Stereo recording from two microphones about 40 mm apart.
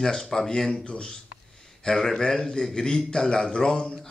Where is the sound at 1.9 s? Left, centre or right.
Centre.